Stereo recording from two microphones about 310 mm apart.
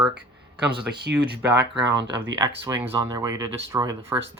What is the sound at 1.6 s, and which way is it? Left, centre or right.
Speech, right.